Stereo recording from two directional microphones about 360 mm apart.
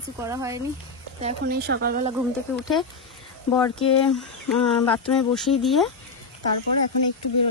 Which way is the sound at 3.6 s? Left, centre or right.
Centre.